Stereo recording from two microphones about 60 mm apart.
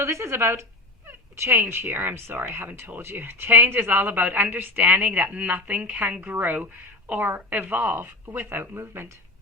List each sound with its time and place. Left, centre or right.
0.0 s speech: right
2.0 s speech: right
2.2 s a woman's voice: right